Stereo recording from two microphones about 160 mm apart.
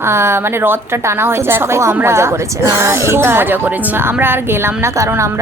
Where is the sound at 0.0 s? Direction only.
15° right (ahead or behind).